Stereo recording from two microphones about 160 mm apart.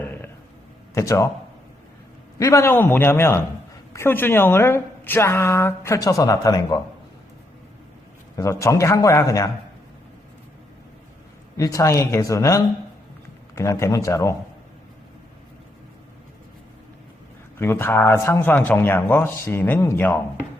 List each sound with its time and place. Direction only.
0.0 s a sound: 10° left (ahead or behind)
0.9 s a man's voice: 20° left (ahead or behind)
2.4 s a woman's voice: 20° left (ahead or behind)
8.4 s a man's voice: 20° left (ahead or behind)
11.5 s a man's voice: 20° left (ahead or behind)
17.6 s a woman's voice: 15° left (ahead or behind)